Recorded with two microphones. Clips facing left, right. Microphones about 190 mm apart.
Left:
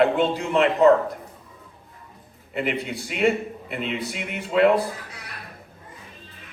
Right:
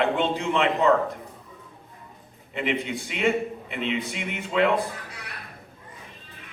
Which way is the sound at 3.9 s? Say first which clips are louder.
Right 3 dB; 35° left (ahead or behind).